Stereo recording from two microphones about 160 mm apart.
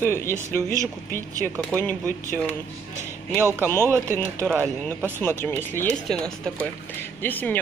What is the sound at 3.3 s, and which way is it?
Speech, 15° right (ahead or behind).